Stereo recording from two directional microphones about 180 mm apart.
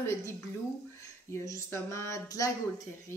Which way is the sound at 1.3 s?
15° left (ahead or behind).